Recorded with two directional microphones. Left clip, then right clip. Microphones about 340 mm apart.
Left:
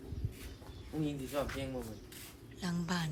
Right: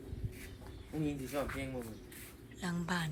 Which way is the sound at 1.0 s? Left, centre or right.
Centre.